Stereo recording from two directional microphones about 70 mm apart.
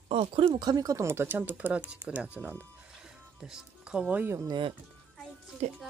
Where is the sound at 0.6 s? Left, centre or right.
Right.